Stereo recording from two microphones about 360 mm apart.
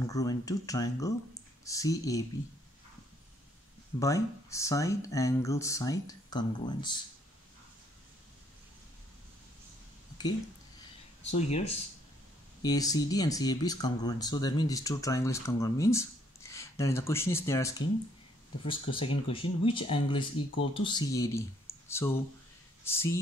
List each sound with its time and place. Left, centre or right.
0.1 s speech: centre
4.0 s speech: centre
11.3 s speech: centre